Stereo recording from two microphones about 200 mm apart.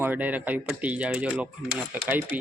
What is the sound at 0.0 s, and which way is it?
Speech, 10° right (ahead or behind).